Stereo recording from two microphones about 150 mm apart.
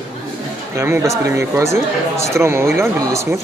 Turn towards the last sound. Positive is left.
turn(degrees=-20)  # may be behind; listen again after turning